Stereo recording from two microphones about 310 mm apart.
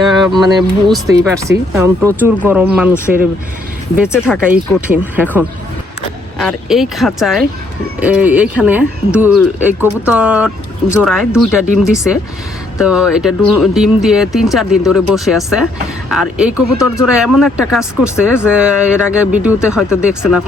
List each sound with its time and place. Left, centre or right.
0.3 s speech: centre
12.8 s speech: centre